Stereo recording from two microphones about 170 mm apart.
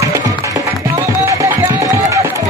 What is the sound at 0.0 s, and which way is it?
Music, 20° right (ahead or behind).